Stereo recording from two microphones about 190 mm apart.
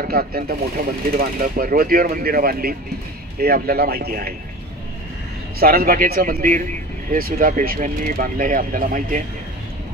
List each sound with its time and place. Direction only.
0.0 s speech: 50° right (ahead or behind)
5.6 s speech: 50° right (ahead or behind)